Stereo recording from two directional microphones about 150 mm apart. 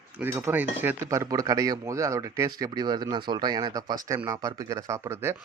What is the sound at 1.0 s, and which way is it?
Speech, 25° right (ahead or behind).